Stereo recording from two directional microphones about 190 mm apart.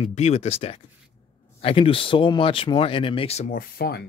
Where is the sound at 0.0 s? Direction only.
35° left (ahead or behind).